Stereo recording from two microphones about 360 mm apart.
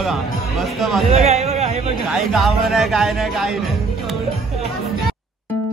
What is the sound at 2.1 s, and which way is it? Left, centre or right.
Speech, centre.